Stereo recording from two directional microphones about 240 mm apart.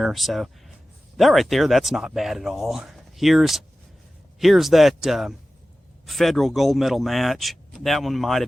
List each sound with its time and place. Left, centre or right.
0.0 s speech: centre